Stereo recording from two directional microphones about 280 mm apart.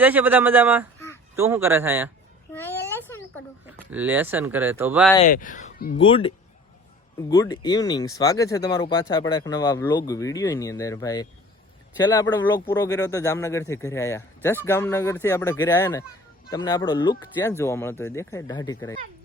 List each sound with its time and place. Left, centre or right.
0.0 s speech: centre
0.9 s a sound: centre
1.4 s speech: centre
2.5 s a sound: centre
3.7 s speech: centre
5.1 s speech: left; by 18.9 s centre